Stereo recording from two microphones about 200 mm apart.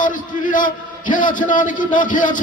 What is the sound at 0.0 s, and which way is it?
A man's voice, 40° left (ahead or behind).